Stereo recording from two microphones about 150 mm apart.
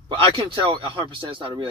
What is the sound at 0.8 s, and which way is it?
Speech, 35° right (ahead or behind).